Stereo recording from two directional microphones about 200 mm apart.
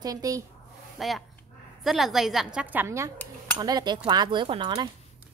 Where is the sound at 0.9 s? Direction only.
Centre (ahead or behind); by 4.8 s 25° right (ahead or behind).